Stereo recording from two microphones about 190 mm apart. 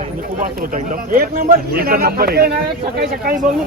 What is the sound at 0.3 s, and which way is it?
A man's voice, 45° right (ahead or behind).